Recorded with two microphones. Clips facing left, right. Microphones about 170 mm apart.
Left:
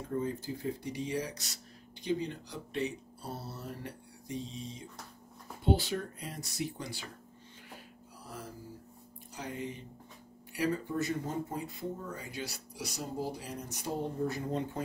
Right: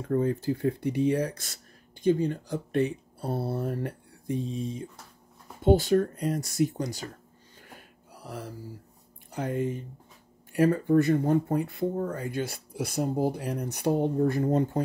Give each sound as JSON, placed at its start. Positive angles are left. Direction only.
{"t": 0.1, "sound": "speech", "side_deg": -65}
{"t": 9.3, "sound": "speech", "side_deg": -55}